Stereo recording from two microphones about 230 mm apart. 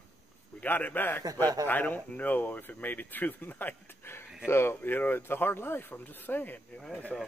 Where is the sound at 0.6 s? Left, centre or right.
Centre.